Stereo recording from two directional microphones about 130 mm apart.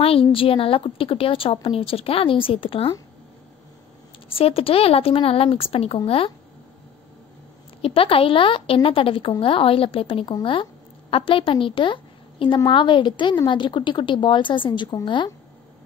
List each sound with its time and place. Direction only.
0.0 s a woman's voice: 45° left (ahead or behind)
4.3 s a woman's voice: 45° left (ahead or behind)
7.8 s a woman's voice: 45° left (ahead or behind)